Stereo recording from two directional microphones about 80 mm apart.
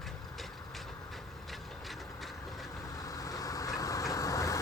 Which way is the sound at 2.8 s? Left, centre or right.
Left.